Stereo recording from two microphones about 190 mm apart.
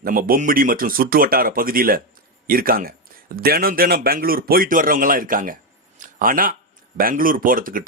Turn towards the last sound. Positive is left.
turn(degrees=-45)  # may be behind; listen again after turning